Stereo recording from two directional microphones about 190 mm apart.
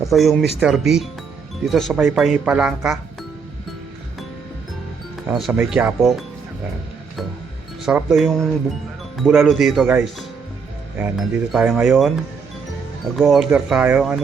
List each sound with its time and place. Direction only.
0.0 s speech: centre (ahead or behind)
5.3 s speech: centre (ahead or behind)
7.9 s speech: centre (ahead or behind)
13.1 s speech: centre (ahead or behind)